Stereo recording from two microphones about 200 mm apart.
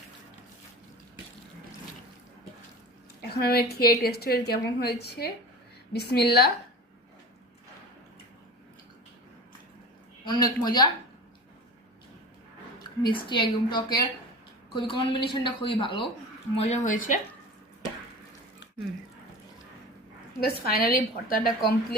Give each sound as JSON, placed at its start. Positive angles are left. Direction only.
{"t": 3.2, "sound": "a woman's voice", "side_deg": 50}
{"t": 10.2, "sound": "a woman's voice", "side_deg": 20}
{"t": 13.0, "sound": "a woman's voice", "side_deg": 25}
{"t": 16.6, "sound": "speech", "side_deg": 35}
{"t": 20.4, "sound": "a woman's voice", "side_deg": 50}